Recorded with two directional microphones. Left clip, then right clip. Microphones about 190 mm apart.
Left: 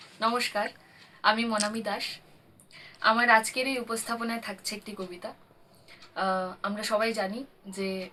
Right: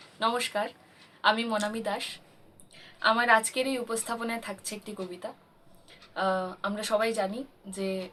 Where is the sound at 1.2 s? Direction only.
Centre (ahead or behind).